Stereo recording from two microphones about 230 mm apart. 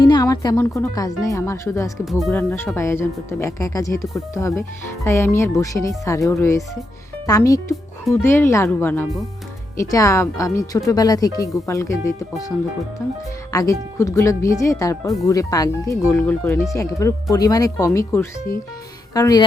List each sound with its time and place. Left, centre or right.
0.0 s speech: centre
2.0 s speech: centre
13.5 s speech: centre